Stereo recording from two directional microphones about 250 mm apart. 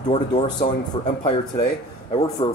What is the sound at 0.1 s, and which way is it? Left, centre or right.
Cutlery, left.